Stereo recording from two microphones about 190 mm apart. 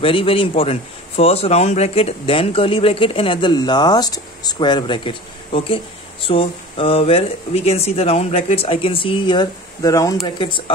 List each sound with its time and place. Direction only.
0.0 s a man's voice: 30° left (ahead or behind)